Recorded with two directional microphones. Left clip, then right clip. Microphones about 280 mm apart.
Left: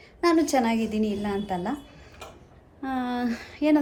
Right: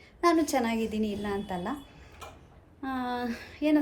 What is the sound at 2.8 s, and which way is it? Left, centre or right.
Speech, centre.